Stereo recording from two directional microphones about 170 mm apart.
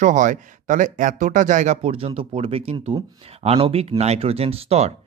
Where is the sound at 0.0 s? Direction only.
50° right (ahead or behind).